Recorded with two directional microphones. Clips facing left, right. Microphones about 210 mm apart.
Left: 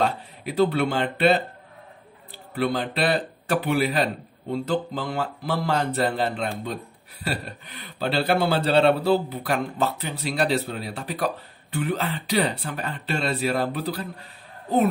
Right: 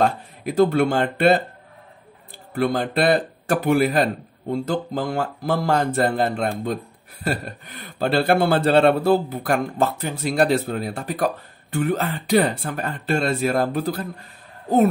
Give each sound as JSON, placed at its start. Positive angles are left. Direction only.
{"t": 0.0, "sound": "speech", "side_deg": -45}
{"t": 2.5, "sound": "speech", "side_deg": -45}